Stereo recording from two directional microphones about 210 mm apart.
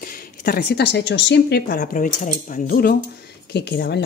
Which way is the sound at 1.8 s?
35° left (ahead or behind).